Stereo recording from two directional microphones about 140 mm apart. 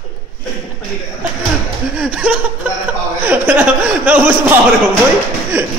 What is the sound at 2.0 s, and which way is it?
Speech, 10° right (ahead or behind).